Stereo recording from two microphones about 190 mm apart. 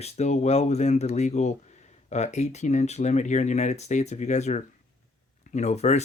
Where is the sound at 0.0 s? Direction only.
35° left (ahead or behind).